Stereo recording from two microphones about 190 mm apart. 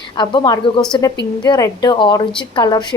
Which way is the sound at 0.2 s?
20° left (ahead or behind).